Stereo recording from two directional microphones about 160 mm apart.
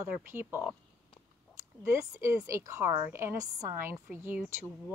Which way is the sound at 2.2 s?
20° right (ahead or behind).